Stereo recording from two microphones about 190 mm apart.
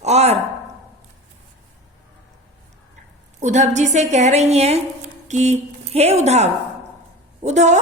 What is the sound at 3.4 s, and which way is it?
A woman's voice, 40° right (ahead or behind).